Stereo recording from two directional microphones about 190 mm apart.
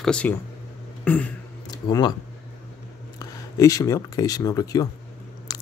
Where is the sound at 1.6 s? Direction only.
20° left (ahead or behind).